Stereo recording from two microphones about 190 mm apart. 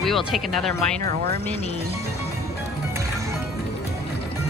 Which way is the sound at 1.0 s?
50° right (ahead or behind).